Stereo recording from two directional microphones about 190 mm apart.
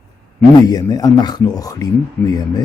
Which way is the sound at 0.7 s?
20° left (ahead or behind).